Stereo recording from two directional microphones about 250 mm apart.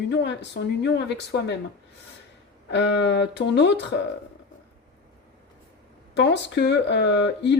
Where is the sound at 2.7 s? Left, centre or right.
Left.